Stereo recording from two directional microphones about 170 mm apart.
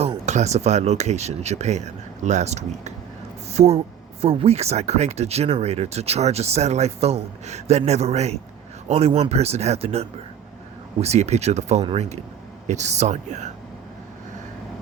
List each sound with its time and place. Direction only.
0.0 s speech: 40° right (ahead or behind)